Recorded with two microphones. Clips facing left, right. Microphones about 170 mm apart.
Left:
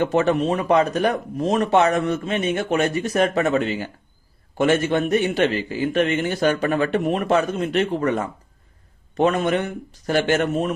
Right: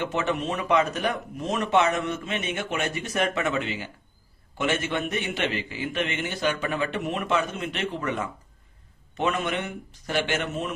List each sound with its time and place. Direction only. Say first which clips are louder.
0.0 s speech: left 8 dB; 40° left (ahead or behind)